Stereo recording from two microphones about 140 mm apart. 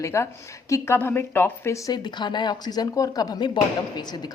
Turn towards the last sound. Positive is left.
turn(degrees=30)  # may be behind; listen again after turning